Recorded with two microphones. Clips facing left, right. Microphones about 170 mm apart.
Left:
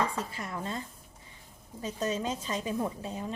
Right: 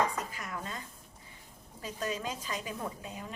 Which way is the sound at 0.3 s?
30° left (ahead or behind).